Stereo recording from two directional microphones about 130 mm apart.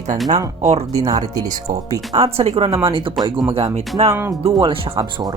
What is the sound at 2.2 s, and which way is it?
Speech, 50° right (ahead or behind).